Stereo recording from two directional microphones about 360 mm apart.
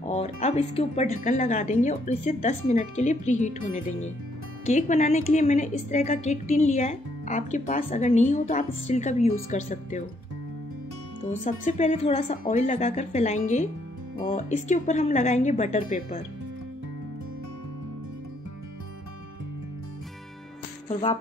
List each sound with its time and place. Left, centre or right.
0.0 s speech: centre
11.4 s speech: centre
20.9 s music: centre